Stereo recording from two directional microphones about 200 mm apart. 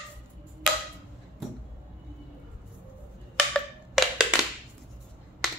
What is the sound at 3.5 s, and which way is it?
Wood block, centre (ahead or behind).